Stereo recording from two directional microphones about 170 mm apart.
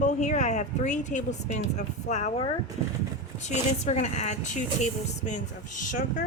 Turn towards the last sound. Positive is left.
turn(degrees=45)  # may be behind; listen again after turning